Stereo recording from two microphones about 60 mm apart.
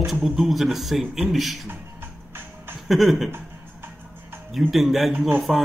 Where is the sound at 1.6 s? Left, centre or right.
Right.